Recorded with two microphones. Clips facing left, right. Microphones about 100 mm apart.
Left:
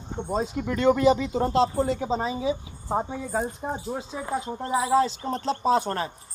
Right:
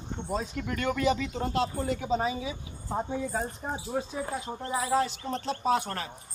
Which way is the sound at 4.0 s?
25° left (ahead or behind).